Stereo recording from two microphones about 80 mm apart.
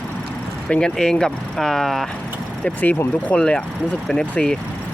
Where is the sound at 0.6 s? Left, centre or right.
Centre.